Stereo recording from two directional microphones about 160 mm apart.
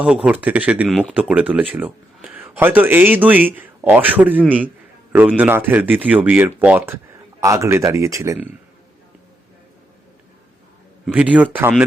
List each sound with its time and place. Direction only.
0.0 s speech: 10° right (ahead or behind)
11.1 s speech: 10° right (ahead or behind)